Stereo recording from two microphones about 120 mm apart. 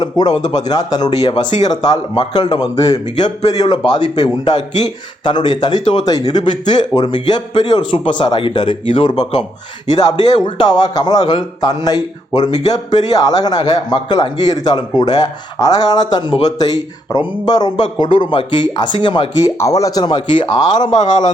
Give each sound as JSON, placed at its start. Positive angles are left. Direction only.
{"t": 0.0, "sound": "a man's voice", "side_deg": 35}
{"t": 19.5, "sound": "a man's voice", "side_deg": 30}
{"t": 20.9, "sound": "speech", "side_deg": 90}